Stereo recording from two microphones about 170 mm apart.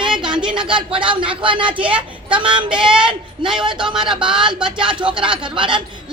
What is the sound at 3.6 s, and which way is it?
Speech, 30° right (ahead or behind).